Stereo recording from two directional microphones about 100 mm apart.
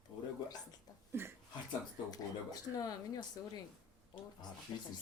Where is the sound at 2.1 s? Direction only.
40° left (ahead or behind).